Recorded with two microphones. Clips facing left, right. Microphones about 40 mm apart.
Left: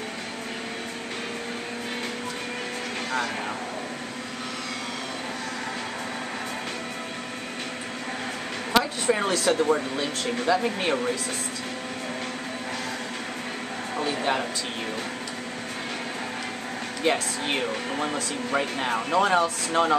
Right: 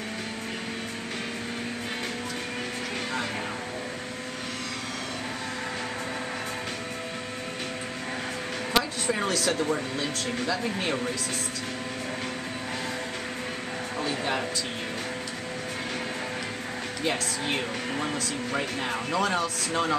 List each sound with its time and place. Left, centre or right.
8.7 s speech: centre
13.9 s a sound: centre
17.0 s speech: centre